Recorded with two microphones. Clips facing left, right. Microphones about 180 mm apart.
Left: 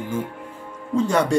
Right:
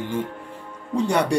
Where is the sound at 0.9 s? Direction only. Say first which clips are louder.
Left 2 dB; 15° right (ahead or behind).